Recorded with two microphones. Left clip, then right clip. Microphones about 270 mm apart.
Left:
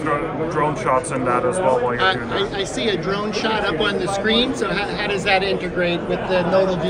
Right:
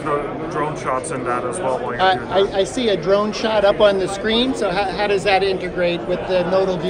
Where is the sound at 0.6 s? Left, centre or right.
Centre.